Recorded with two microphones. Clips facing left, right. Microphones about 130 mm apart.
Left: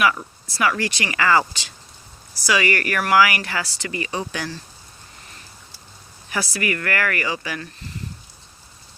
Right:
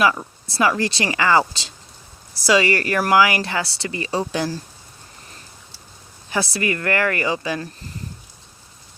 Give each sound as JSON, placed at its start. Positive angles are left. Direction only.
{"t": 0.0, "sound": "speech", "side_deg": -25}
{"t": 6.3, "sound": "speech", "side_deg": -25}